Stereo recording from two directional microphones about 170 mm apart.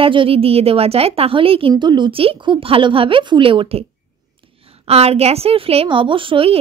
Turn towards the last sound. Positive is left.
turn(degrees=-30)  # may be behind; listen again after turning